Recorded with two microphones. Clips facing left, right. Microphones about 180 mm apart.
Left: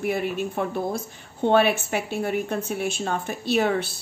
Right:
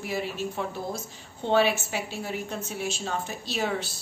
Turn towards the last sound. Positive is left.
turn(degrees=60)  # may be behind; listen again after turning